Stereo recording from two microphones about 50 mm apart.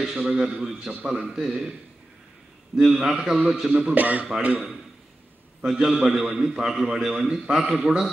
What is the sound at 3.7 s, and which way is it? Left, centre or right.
Speech, right.